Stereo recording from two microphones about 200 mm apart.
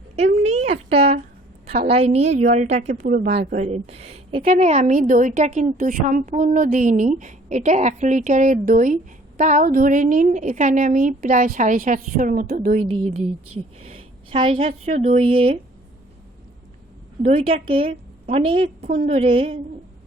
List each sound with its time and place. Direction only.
0.2 s a sound: 35° right (ahead or behind)
1.9 s a woman's voice: 30° right (ahead or behind)
3.1 s a woman's voice: 50° right (ahead or behind)
12.8 s a woman's voice: 30° right (ahead or behind)
17.2 s a woman's voice: 30° right (ahead or behind)